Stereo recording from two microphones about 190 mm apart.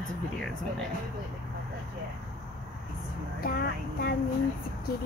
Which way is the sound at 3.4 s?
55° left (ahead or behind).